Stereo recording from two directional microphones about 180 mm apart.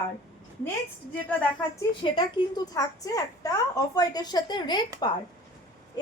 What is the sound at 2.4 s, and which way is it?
A woman's voice, 25° left (ahead or behind).